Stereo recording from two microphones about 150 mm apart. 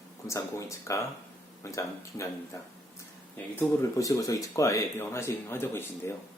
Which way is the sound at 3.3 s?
20° left (ahead or behind).